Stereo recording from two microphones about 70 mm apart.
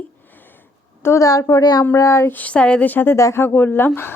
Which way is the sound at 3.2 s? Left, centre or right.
Left.